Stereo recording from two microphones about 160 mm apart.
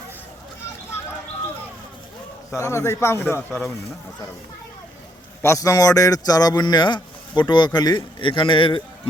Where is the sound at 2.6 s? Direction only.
15° left (ahead or behind).